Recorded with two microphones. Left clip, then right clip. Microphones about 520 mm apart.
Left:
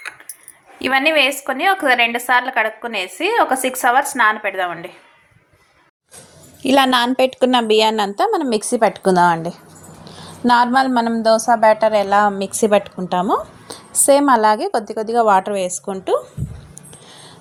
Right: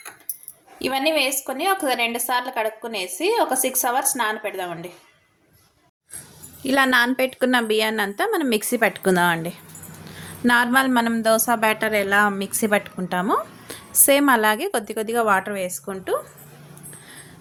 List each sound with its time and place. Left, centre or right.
0.8 s a woman's voice: centre
6.6 s a woman's voice: right